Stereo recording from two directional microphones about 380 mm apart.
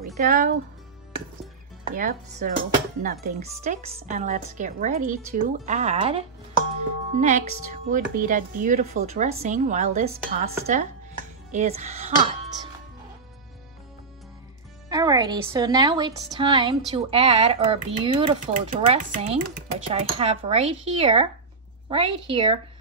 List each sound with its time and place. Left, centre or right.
0.2 s speech: right
2.0 s speech: right
14.9 s a woman's voice: centre